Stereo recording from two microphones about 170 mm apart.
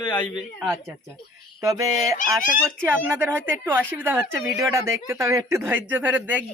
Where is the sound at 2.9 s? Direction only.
10° right (ahead or behind).